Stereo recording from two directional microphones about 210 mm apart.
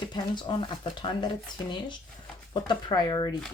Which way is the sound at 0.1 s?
20° left (ahead or behind).